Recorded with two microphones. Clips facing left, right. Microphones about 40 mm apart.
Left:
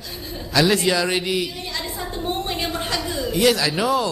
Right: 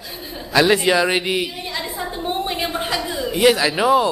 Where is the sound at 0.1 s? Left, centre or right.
Centre.